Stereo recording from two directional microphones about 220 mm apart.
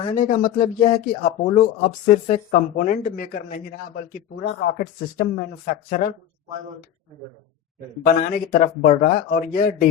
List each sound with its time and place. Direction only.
0.0 s speech: 35° left (ahead or behind)
5.1 s speech: 40° left (ahead or behind)
8.0 s speech: 40° left (ahead or behind)